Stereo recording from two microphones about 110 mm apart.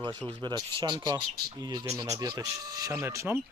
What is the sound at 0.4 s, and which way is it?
Speech, 40° right (ahead or behind).